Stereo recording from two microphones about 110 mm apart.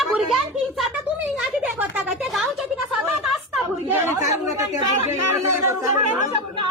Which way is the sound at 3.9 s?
20° right (ahead or behind).